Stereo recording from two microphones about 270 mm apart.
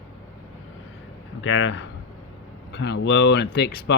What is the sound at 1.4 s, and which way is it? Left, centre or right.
Speech, left.